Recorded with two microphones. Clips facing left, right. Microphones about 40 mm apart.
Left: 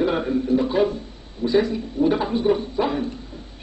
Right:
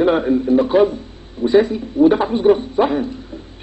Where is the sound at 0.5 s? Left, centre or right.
Right.